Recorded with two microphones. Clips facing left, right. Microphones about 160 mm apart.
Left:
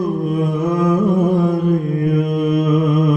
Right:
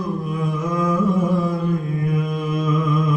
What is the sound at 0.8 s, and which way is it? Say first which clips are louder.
Music: left 3 dB; 55° left (ahead or behind).